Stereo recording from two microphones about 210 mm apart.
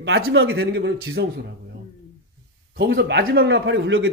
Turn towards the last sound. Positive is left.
turn(degrees=-60)  # may be behind; listen again after turning